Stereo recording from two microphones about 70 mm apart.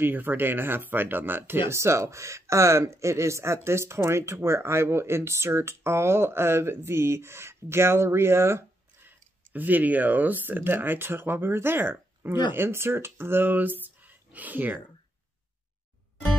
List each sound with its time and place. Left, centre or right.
0.0 s speech: right
9.5 s speech: right